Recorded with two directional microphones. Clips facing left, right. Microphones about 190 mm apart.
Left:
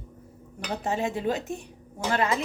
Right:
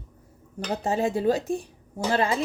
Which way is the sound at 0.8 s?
35° right (ahead or behind).